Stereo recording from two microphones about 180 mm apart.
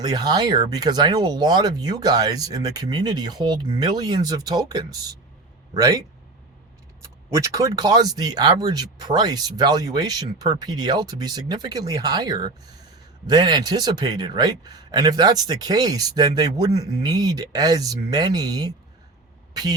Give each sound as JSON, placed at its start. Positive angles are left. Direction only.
{"t": 0.0, "sound": "a man's voice", "side_deg": -20}
{"t": 7.3, "sound": "a man's voice", "side_deg": -15}